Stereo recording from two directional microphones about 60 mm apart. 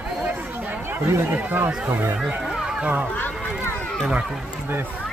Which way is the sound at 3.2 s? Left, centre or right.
Left.